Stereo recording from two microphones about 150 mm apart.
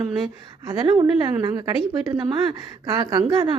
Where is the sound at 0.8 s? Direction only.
35° right (ahead or behind).